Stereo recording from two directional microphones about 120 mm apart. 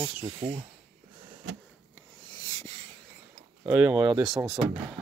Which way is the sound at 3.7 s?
15° right (ahead or behind).